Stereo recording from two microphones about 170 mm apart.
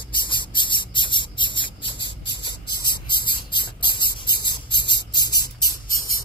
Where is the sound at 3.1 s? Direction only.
25° left (ahead or behind).